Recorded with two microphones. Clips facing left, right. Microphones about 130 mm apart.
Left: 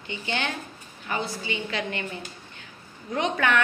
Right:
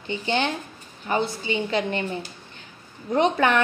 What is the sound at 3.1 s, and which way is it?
Speech, 30° right (ahead or behind).